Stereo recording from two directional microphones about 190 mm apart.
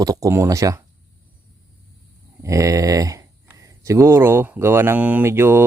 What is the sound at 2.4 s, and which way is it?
Speech, 15° right (ahead or behind).